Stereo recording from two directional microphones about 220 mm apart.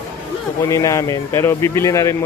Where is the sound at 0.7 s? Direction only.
15° left (ahead or behind).